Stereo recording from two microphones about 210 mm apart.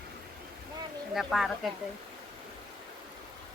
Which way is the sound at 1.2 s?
Centre (ahead or behind).